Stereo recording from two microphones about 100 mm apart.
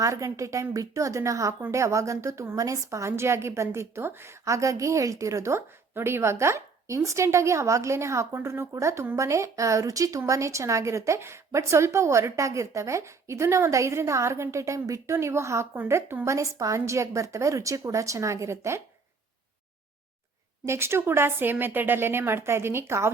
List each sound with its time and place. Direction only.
0.0 s a woman's voice: 30° right (ahead or behind)
15.7 s a woman's voice: 15° right (ahead or behind)
20.7 s a woman's voice: 25° right (ahead or behind)